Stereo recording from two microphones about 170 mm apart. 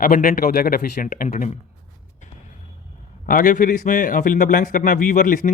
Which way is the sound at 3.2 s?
55° left (ahead or behind).